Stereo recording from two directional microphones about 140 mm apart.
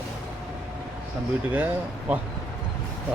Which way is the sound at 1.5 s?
10° right (ahead or behind).